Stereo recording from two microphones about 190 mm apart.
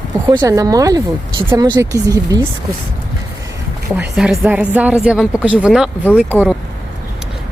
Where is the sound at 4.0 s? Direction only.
5° right (ahead or behind).